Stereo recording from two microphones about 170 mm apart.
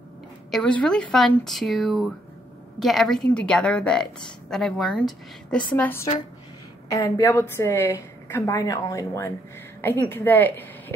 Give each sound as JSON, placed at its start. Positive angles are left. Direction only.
{"t": 0.5, "sound": "a woman's voice", "side_deg": 5}